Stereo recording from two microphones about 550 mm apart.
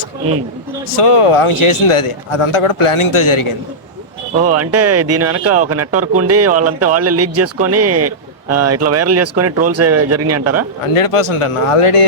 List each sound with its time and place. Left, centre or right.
0.9 s a man's voice: left
4.5 s speech: right
10.9 s speech: left